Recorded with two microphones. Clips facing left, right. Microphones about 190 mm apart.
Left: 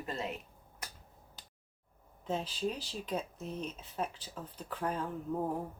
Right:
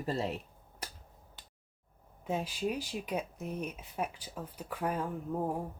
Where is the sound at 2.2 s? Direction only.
10° right (ahead or behind).